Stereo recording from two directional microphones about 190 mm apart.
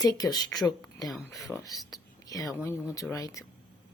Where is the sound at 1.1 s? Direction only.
Centre (ahead or behind).